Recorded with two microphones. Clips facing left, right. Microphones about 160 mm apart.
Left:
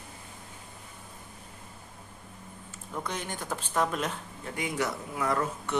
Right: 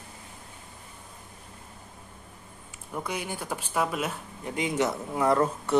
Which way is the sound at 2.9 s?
10° right (ahead or behind).